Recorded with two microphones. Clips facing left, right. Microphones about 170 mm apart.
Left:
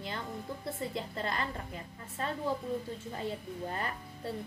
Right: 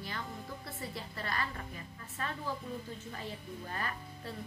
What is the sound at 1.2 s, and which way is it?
Speech, 25° left (ahead or behind).